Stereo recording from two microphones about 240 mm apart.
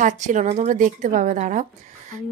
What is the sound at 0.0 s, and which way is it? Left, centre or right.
A woman's voice, right.